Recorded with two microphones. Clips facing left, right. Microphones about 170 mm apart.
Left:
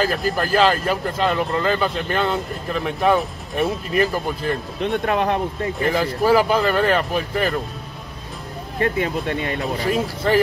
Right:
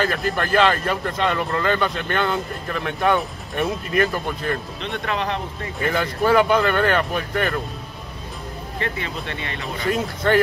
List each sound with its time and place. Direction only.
0.0 s speech: centre (ahead or behind)
4.7 s speech: 55° left (ahead or behind)
5.8 s speech: 5° left (ahead or behind)
8.8 s speech: 50° left (ahead or behind)
9.8 s speech: 5° left (ahead or behind)